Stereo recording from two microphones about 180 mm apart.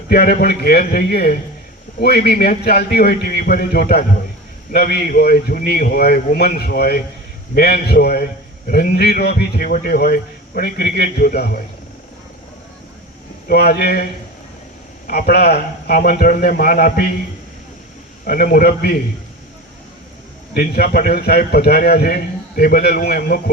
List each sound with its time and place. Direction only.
0.1 s a man's voice: 60° left (ahead or behind)
13.5 s a man's voice: 60° left (ahead or behind)
18.3 s a man's voice: 55° left (ahead or behind)
20.5 s a man's voice: 60° left (ahead or behind)